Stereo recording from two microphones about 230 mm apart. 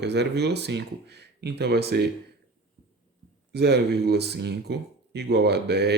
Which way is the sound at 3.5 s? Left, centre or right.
Right.